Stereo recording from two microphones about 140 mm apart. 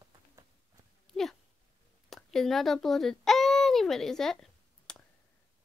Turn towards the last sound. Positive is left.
turn(degrees=5)  # may be behind; listen again after turning